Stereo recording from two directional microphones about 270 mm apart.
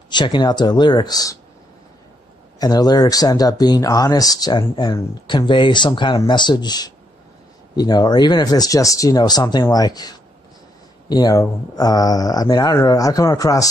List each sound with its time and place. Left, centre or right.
0.1 s speech: centre
2.6 s speech: centre